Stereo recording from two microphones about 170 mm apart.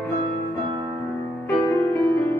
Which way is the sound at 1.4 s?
15° left (ahead or behind).